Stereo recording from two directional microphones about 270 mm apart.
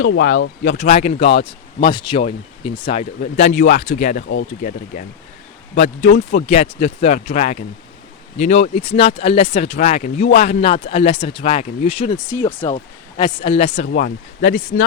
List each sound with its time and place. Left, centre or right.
0.0 s speech: left
0.8 s speech: left
5.7 s speech: left